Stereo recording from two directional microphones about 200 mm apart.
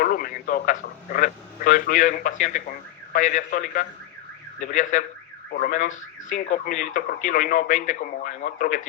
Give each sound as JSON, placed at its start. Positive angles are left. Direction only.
{"t": 0.0, "sound": "speech", "side_deg": 45}